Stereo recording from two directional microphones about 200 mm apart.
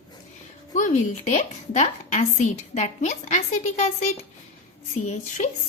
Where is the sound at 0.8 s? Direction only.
40° left (ahead or behind).